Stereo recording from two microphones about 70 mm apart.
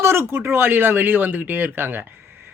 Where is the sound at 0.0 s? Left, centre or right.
Right.